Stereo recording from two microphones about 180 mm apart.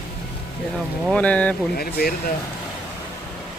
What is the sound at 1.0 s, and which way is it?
Speech, 5° left (ahead or behind).